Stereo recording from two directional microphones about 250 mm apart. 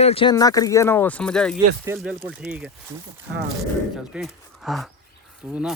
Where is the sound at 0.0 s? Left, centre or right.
Left; by 2.7 s centre.